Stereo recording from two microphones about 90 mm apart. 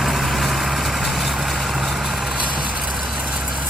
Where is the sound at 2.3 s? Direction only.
65° right (ahead or behind).